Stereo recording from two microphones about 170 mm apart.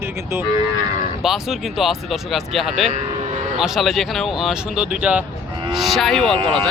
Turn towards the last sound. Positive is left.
turn(degrees=0)  # may be behind; listen again after turning